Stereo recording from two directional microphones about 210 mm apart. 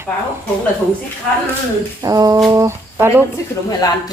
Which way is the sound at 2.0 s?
15° right (ahead or behind).